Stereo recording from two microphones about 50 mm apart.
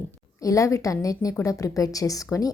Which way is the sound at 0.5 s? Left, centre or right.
Left.